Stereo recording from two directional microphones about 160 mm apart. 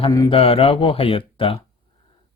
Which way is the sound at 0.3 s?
35° left (ahead or behind).